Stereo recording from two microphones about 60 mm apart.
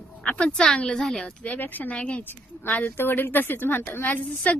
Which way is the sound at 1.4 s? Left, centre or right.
Left.